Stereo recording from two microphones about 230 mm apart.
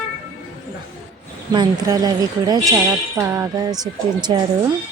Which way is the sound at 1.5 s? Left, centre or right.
Centre.